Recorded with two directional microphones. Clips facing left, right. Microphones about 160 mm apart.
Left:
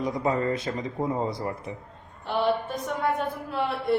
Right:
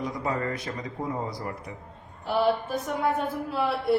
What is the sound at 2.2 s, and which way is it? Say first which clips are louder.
A woman's voice: right 1 dB; 5° right (ahead or behind).